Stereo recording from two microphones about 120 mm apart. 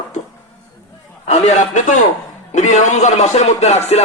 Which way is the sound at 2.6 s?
85° left.